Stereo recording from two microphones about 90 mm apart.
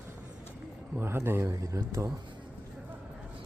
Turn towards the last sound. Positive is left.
turn(degrees=-35)  # may be behind; listen again after turning